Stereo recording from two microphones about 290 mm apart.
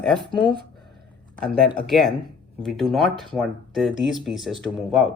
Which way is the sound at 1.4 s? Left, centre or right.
Right.